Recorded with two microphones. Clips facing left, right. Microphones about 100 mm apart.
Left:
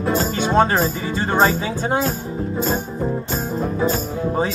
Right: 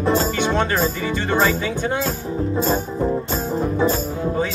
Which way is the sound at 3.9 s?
30° left (ahead or behind).